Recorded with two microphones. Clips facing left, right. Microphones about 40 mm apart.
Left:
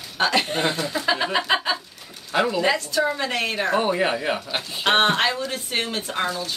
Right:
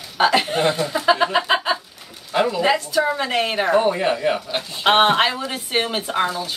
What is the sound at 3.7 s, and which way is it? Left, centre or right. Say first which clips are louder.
Speech: right 3 dB; centre.